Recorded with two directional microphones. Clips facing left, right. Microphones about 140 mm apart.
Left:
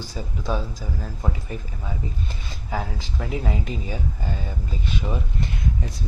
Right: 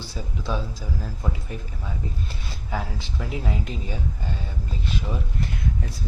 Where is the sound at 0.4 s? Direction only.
45° left (ahead or behind).